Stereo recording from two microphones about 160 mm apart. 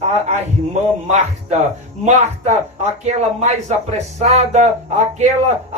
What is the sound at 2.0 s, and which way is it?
Speech, 45° right (ahead or behind).